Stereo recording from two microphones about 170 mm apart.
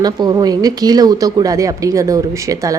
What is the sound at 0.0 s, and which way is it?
A woman's voice, 25° right (ahead or behind).